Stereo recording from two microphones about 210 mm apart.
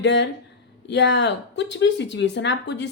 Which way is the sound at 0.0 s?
55° left (ahead or behind).